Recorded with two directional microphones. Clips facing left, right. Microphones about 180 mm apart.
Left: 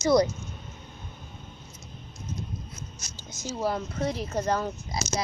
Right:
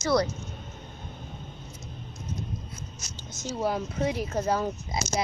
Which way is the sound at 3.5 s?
Centre (ahead or behind).